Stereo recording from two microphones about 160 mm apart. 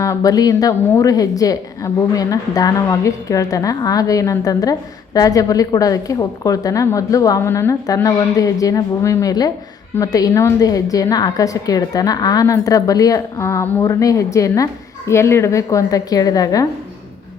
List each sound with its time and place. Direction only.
0.0 s a woman's voice: 20° left (ahead or behind)